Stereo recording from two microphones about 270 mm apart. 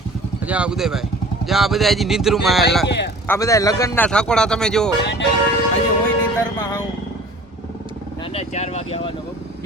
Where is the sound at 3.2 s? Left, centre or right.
Centre.